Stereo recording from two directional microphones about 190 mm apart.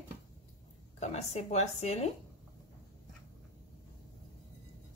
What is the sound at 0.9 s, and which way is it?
Cutlery, 35° left (ahead or behind).